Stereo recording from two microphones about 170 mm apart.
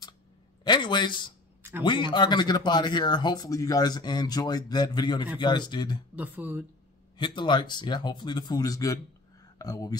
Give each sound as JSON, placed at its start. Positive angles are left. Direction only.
{"t": 0.7, "sound": "speech", "side_deg": 25}
{"t": 6.1, "sound": "speech", "side_deg": -10}
{"t": 7.2, "sound": "speech", "side_deg": 30}